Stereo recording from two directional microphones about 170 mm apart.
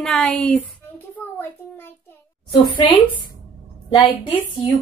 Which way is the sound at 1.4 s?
10° left (ahead or behind).